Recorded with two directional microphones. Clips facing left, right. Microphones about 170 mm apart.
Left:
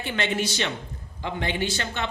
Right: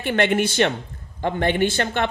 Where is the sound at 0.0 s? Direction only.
55° right (ahead or behind).